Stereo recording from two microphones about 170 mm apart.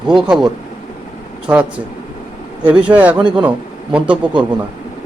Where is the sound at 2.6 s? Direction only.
10° right (ahead or behind).